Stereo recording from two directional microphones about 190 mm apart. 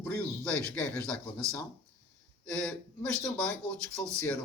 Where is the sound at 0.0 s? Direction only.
5° left (ahead or behind).